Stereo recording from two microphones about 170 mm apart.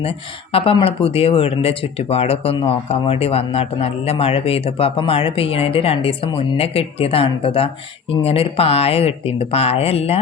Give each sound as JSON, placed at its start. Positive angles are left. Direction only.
{"t": 0.0, "sound": "speech", "side_deg": 35}